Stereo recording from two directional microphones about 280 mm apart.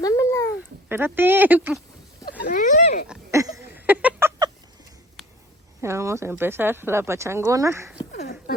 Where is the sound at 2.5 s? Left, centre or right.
Left.